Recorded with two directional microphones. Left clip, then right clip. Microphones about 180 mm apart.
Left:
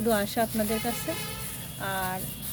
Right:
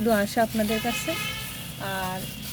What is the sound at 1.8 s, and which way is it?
Speech, 20° right (ahead or behind).